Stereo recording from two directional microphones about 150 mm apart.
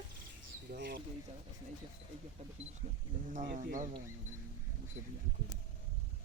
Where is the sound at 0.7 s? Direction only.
90° right.